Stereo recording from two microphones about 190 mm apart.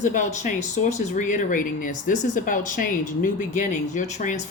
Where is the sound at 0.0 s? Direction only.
40° left (ahead or behind).